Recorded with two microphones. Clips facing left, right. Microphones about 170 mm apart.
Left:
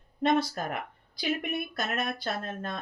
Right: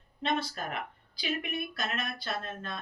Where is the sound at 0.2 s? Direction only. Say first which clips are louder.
Left 6 dB; 45° left (ahead or behind).